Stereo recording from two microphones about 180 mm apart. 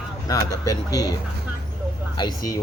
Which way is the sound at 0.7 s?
20° left (ahead or behind).